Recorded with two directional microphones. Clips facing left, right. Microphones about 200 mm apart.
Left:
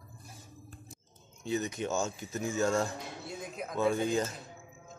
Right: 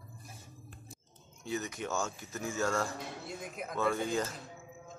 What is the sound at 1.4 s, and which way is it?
Speech, 25° left (ahead or behind).